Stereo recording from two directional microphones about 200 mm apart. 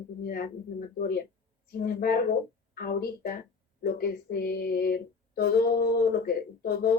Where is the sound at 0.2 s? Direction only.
50° left (ahead or behind).